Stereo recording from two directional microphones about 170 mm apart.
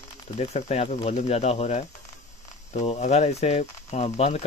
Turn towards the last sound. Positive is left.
turn(degrees=35)  # may be behind; listen again after turning